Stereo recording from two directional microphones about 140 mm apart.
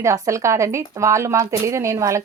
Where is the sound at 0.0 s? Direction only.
20° right (ahead or behind).